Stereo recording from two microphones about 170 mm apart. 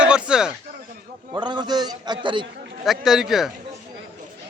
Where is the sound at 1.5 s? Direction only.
25° right (ahead or behind).